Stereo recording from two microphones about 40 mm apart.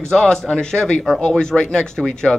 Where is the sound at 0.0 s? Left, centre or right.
Centre.